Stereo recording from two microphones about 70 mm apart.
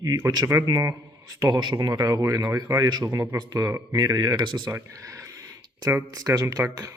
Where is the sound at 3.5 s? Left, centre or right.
Right.